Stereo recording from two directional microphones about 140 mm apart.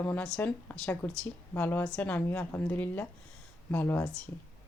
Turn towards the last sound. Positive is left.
turn(degrees=15)  # may be behind; listen again after turning